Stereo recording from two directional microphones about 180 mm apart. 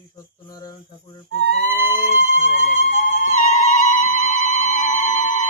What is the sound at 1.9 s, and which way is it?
Vehicle, 45° left (ahead or behind).